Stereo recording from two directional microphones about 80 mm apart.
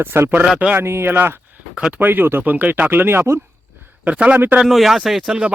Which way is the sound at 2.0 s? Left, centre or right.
Right.